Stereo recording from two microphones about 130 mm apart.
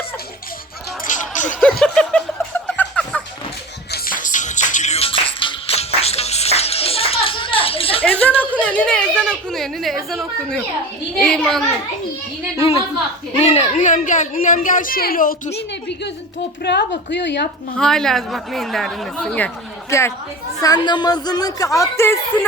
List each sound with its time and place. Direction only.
1.0 s music: 75° left (ahead or behind)
1.6 s music: 5° left (ahead or behind)
4.0 s music: 85° left; by 8.0 s 45° left (ahead or behind)
8.0 s a sound: 10° left (ahead or behind)
11.2 s speech: 5° left (ahead or behind)
12.5 s a woman's voice: 50° left (ahead or behind); by 15.4 s 90° left
17.7 s speech: 5° left (ahead or behind)
19.9 s speech: 20° left (ahead or behind)
20.6 s speech: 30° left (ahead or behind)